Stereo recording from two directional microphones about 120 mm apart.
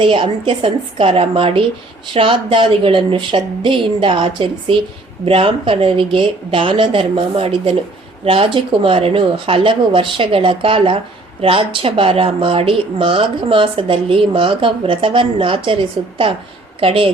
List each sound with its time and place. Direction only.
0.0 s speech: 45° right (ahead or behind)